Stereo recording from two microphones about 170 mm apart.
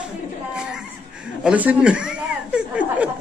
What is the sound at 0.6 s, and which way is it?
Chuckle, 5° right (ahead or behind).